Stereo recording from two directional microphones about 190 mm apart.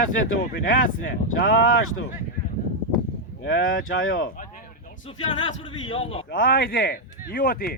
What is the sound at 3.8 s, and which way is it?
Speech, 90° left.